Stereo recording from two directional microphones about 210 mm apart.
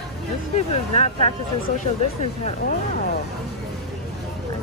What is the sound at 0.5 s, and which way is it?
Speech, 30° left (ahead or behind).